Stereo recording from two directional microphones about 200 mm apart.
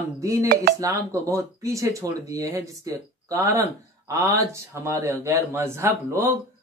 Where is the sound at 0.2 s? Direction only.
15° right (ahead or behind).